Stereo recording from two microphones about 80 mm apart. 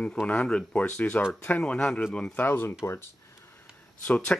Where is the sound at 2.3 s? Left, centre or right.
Left.